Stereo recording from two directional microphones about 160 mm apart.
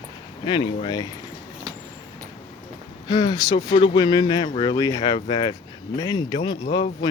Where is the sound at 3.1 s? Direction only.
25° left (ahead or behind).